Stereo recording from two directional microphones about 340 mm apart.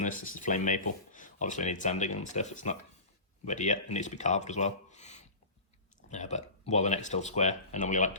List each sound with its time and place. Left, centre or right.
0.3 s speech: left